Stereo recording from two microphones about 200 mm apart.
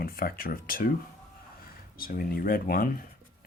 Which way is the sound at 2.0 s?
45° left (ahead or behind).